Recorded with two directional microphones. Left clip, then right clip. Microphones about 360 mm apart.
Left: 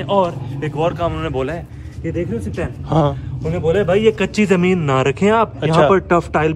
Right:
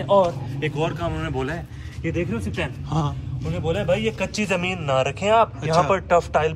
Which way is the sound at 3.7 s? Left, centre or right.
Centre.